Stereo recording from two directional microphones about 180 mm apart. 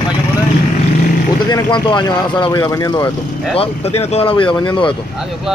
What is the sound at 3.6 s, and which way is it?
Speech, 35° left (ahead or behind).